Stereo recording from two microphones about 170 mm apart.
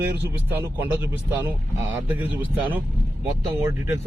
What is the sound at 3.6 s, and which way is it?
Speech, 15° right (ahead or behind).